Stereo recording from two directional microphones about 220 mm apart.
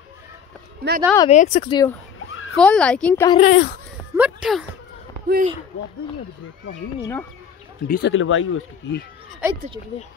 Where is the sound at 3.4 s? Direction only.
35° left (ahead or behind).